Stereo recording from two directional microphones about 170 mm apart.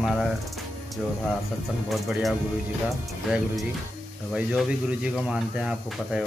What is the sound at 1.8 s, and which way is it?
Speech, centre (ahead or behind).